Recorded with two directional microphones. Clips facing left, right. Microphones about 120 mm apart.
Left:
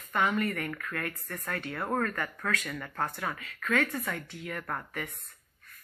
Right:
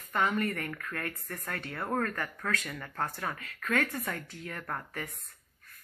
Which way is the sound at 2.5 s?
30° right (ahead or behind).